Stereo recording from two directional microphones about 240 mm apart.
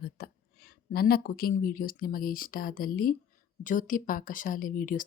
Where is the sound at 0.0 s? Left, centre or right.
Left.